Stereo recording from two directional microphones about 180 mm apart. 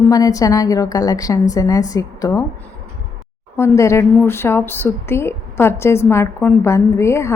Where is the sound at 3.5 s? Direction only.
15° left (ahead or behind).